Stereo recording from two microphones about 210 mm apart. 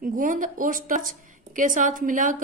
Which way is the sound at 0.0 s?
40° right (ahead or behind).